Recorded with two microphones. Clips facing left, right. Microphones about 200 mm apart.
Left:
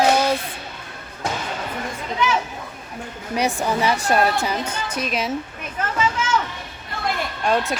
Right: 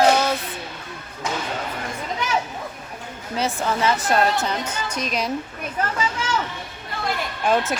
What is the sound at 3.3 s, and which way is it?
Speech, 15° left (ahead or behind).